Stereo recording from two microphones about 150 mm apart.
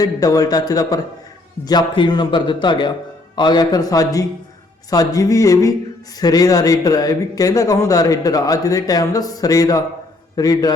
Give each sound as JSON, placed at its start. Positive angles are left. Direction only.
{"t": 0.0, "sound": "speech", "side_deg": 25}